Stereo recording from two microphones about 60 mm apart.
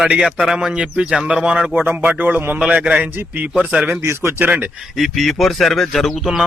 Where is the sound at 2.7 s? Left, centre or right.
Centre.